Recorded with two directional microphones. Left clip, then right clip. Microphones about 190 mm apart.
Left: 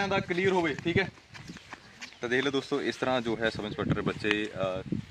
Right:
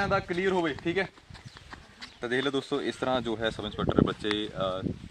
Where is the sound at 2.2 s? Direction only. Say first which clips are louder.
Even; centre (ahead or behind).